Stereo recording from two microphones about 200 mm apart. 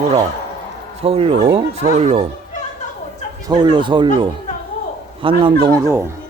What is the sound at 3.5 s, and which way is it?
Speech, 25° right (ahead or behind).